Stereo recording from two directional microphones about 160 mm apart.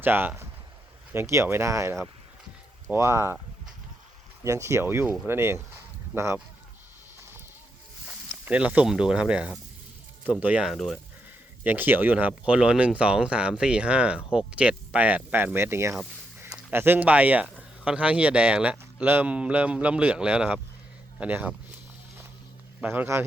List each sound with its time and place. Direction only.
0.0 s speech: 15° right (ahead or behind)
4.4 s speech: 20° right (ahead or behind)
8.0 s speech: 10° right (ahead or behind)
11.6 s speech: 10° right (ahead or behind)
22.8 s speech: 10° right (ahead or behind)